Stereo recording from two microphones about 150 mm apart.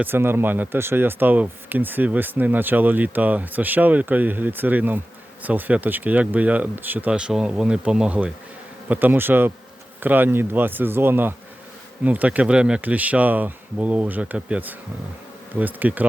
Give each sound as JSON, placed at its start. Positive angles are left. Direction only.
{"t": 0.0, "sound": "speech", "side_deg": -15}